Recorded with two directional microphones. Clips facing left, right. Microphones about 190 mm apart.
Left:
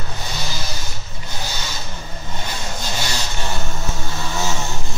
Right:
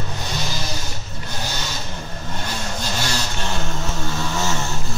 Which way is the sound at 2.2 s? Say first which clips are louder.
Right 1 dB; 10° left (ahead or behind).